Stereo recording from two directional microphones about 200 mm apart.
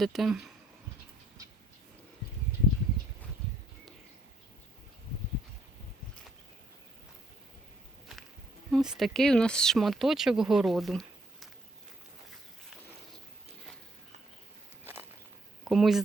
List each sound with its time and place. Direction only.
0.0 s speech: centre (ahead or behind)
8.7 s speech: centre (ahead or behind)
15.6 s speech: centre (ahead or behind)